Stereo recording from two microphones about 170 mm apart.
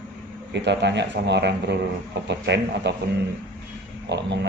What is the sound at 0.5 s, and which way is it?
Speech, 90° right.